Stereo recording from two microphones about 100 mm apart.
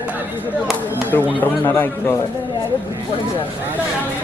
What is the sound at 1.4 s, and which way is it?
Speech, 20° left (ahead or behind).